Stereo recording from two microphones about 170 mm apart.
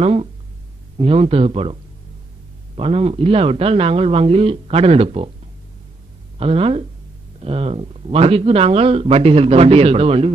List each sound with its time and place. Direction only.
0.0 s speech: 35° right (ahead or behind)
6.3 s speech: 35° right (ahead or behind)